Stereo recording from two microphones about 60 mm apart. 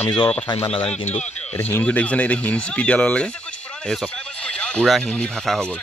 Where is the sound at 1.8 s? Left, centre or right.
Left.